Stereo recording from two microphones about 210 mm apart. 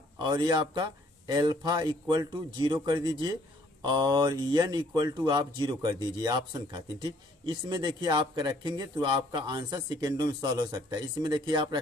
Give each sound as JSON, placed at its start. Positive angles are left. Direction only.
{"t": 0.2, "sound": "speech", "side_deg": -20}